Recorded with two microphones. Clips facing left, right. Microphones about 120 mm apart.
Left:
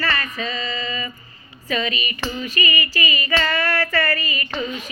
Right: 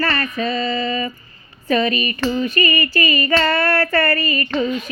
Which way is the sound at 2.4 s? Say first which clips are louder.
Right 6 dB; 50° right (ahead or behind).